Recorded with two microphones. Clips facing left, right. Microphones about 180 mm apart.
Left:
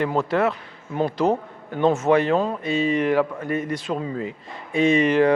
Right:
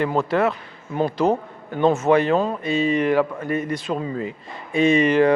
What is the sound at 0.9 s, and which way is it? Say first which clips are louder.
Speech: right 1 dB; 30° right (ahead or behind).